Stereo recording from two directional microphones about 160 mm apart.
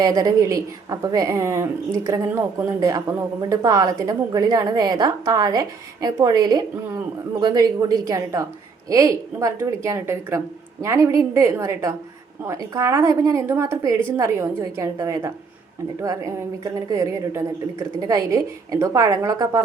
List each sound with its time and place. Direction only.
0.0 s a woman's voice: 20° right (ahead or behind)